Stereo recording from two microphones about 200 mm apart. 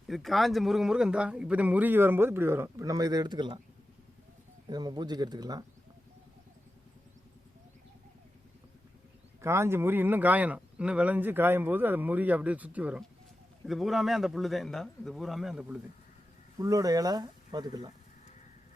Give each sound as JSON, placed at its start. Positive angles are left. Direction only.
{"t": 0.1, "sound": "speech", "side_deg": 0}
{"t": 4.7, "sound": "speech", "side_deg": -20}
{"t": 9.4, "sound": "a man's voice", "side_deg": -15}
{"t": 16.6, "sound": "speech", "side_deg": -15}